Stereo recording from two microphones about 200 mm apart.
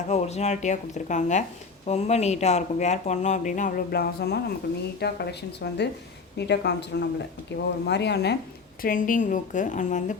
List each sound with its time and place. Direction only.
0.1 s a woman's voice: 35° left (ahead or behind); by 8.4 s 55° left (ahead or behind)
8.8 s speech: 45° left (ahead or behind)